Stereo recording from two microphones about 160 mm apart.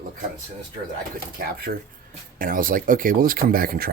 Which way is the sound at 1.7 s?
60° right (ahead or behind).